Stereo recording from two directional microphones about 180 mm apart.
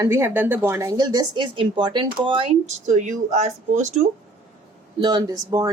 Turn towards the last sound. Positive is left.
turn(degrees=-20)  # may be behind; listen again after turning